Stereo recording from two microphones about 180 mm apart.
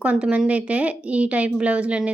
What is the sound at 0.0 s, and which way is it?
A woman's voice, 5° right (ahead or behind).